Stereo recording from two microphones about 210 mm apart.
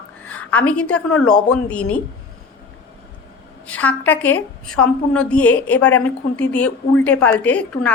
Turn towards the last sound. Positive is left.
turn(degrees=5)  # may be behind; listen again after turning